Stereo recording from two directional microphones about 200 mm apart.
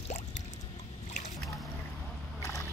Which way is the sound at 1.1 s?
40° left (ahead or behind).